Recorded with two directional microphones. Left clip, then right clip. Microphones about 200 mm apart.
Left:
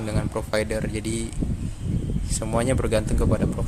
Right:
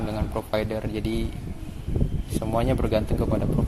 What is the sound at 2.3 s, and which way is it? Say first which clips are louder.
Speech: left 1 dB; 25° left (ahead or behind).